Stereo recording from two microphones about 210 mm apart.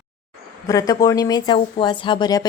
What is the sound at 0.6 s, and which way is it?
A woman's voice, 15° left (ahead or behind).